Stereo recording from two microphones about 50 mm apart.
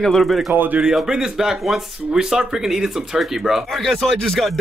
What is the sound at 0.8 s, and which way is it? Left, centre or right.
Speech, centre.